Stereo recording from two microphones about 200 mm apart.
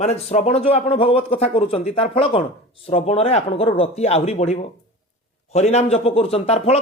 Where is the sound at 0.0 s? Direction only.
30° left (ahead or behind).